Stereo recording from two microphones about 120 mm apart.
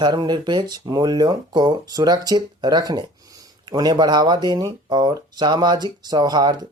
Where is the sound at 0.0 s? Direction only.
40° right (ahead or behind).